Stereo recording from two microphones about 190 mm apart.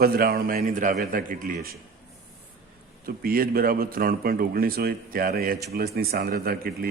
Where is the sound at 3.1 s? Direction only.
50° right (ahead or behind).